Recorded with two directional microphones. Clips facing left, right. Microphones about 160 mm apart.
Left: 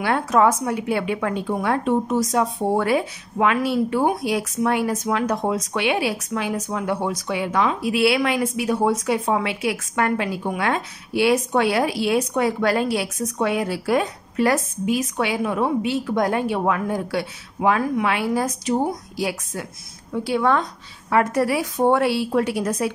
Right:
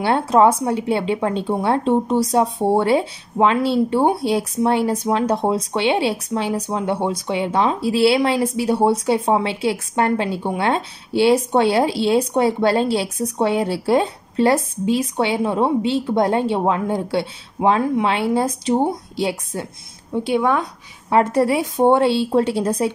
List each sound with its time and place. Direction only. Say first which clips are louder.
0.0 s a woman's voice: right 3 dB; 30° right (ahead or behind)
21.1 s a woman's voice: right 3 dB; 25° right (ahead or behind)